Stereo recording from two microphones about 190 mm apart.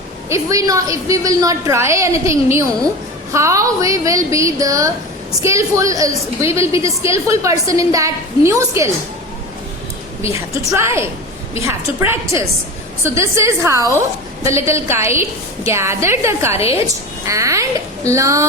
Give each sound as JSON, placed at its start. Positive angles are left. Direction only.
{"t": 0.3, "sound": "a woman's voice", "side_deg": -15}
{"t": 10.8, "sound": "a woman's voice", "side_deg": -15}